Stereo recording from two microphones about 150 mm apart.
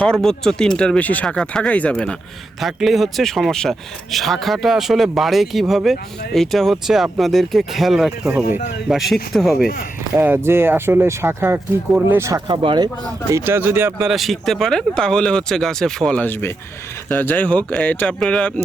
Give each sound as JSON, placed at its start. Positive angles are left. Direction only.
{"t": 0.0, "sound": "speech", "side_deg": 5}
{"t": 10.2, "sound": "speech", "side_deg": -15}
{"t": 12.5, "sound": "speech", "side_deg": -30}
{"t": 13.3, "sound": "speech", "side_deg": -15}
{"t": 14.1, "sound": "speech", "side_deg": 0}